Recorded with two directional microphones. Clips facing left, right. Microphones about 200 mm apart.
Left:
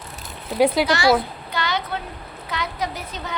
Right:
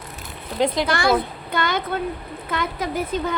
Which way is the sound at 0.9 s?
55° right (ahead or behind).